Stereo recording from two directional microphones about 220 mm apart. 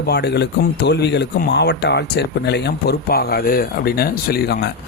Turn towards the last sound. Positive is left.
turn(degrees=45)  # may be behind; listen again after turning